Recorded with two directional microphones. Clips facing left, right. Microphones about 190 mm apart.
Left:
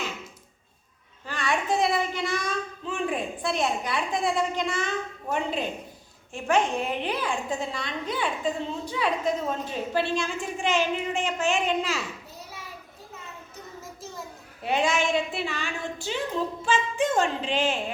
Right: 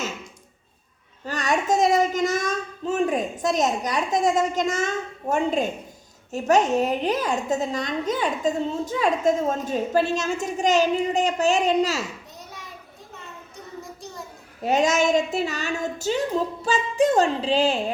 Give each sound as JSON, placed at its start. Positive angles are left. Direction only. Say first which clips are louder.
{"t": 1.2, "sound": "a child's voice", "louder": "right 4 dB", "side_deg": -40}
{"t": 13.8, "sound": "a sound", "louder": "right 1 dB", "side_deg": 0}
{"t": 14.6, "sound": "a woman's voice", "louder": "right 5 dB", "side_deg": -40}